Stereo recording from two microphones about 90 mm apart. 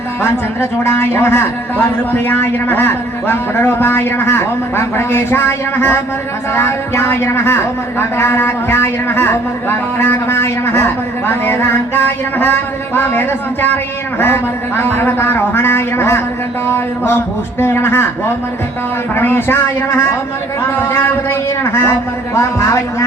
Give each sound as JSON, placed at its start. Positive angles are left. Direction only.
{"t": 0.2, "sound": "a man's voice", "side_deg": 25}